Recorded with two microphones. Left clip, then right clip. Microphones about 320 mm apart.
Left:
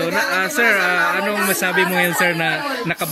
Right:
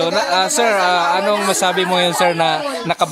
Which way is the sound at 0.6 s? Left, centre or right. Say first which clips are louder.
Left 1 dB; centre.